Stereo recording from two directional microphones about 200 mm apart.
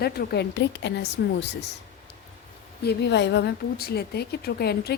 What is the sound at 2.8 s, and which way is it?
Speech, 60° left (ahead or behind).